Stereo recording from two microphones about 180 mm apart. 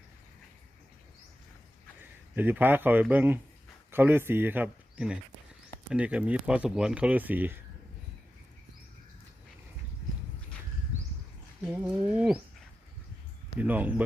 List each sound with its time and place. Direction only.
2.0 s a man's voice: 10° right (ahead or behind)
11.6 s bird: 5° right (ahead or behind)
13.6 s speech: 10° right (ahead or behind)